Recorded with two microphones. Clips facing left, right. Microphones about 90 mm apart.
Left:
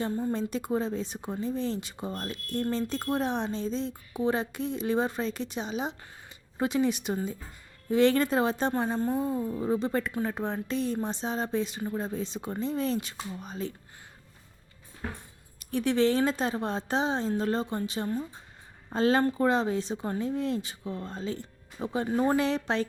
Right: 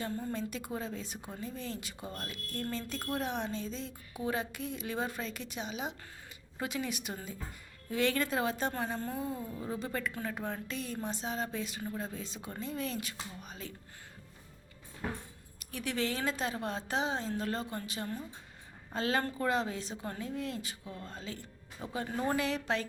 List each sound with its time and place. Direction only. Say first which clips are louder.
0.0 s a woman's voice: left 7 dB; 25° left (ahead or behind)
15.5 s a woman's voice: left 10 dB; 30° left (ahead or behind)